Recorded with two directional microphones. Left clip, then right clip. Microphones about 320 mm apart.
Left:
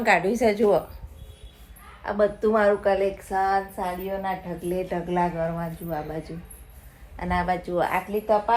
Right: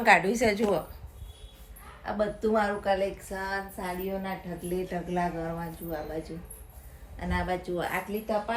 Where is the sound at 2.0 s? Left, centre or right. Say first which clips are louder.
Left 6 dB; left.